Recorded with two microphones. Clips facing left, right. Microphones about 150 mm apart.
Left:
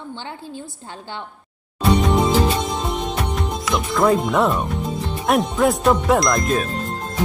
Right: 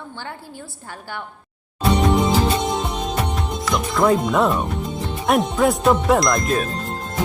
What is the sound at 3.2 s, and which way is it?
Speech, centre (ahead or behind).